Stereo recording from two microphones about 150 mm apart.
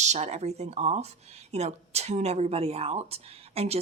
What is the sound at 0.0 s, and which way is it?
Speech, 50° right (ahead or behind).